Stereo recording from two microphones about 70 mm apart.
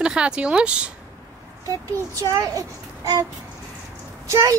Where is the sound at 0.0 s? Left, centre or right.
Centre.